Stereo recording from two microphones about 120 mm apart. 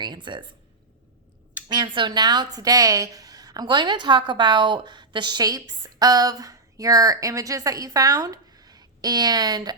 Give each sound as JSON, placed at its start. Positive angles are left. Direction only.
{"t": 0.0, "sound": "a woman's voice", "side_deg": -40}
{"t": 1.6, "sound": "a woman's voice", "side_deg": -40}